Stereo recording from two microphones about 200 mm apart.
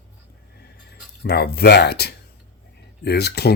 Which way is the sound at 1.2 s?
55° left (ahead or behind).